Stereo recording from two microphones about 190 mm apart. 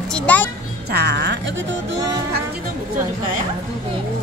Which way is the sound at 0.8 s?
60° right (ahead or behind).